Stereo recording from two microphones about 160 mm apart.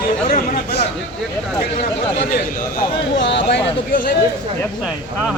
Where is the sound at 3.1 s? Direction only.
90° left.